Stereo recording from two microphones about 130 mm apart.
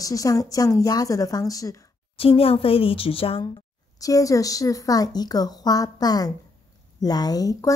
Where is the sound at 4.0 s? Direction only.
25° left (ahead or behind).